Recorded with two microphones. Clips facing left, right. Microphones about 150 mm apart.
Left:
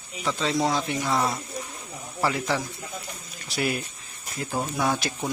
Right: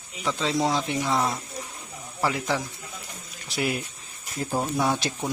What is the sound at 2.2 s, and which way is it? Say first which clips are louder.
Speech: even; 10° right (ahead or behind).